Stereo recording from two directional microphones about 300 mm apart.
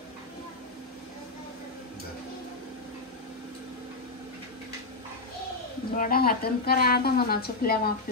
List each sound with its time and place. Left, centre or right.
5.9 s a woman's voice: left